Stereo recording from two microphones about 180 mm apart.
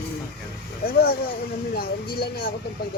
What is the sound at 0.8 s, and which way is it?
Speech, 60° left (ahead or behind).